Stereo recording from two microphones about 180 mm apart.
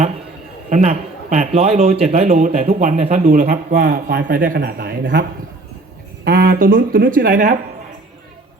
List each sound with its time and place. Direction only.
0.7 s a man's voice: 40° right (ahead or behind)
6.2 s speech: 55° right (ahead or behind)